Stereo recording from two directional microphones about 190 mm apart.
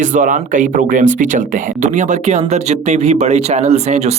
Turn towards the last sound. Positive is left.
turn(degrees=-35)  # may be behind; listen again after turning